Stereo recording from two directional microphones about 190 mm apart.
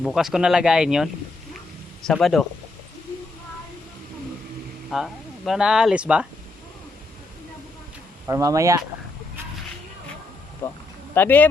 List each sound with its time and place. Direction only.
0.0 s speech: centre (ahead or behind)
4.9 s speech: centre (ahead or behind)
8.3 s speech: 15° right (ahead or behind)
10.6 s speech: 15° left (ahead or behind)